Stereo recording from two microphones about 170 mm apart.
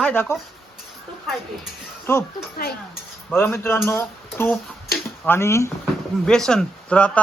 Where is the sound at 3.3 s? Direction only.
10° left (ahead or behind).